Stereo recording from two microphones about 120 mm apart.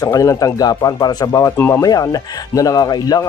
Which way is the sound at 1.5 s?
20° left (ahead or behind).